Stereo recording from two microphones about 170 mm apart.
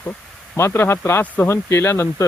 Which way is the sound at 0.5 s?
15° left (ahead or behind).